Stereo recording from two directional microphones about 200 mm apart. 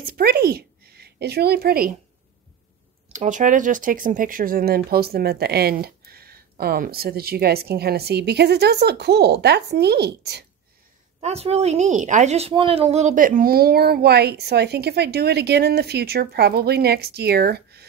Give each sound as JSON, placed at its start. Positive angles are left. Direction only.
{"t": 0.1, "sound": "a woman's voice", "side_deg": -50}
{"t": 3.1, "sound": "a woman's voice", "side_deg": -40}
{"t": 11.1, "sound": "a woman's voice", "side_deg": -30}